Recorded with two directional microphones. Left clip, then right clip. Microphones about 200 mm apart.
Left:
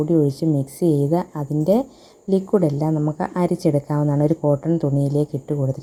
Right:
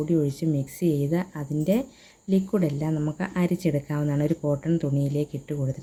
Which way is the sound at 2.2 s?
5° left (ahead or behind).